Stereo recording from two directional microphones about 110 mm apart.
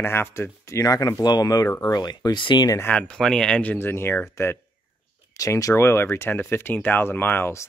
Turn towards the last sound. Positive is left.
turn(degrees=20)  # may be behind; listen again after turning